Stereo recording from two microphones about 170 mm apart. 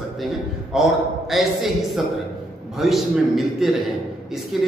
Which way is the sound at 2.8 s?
Centre (ahead or behind).